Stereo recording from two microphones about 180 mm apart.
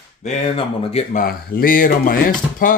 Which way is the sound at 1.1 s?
55° left (ahead or behind).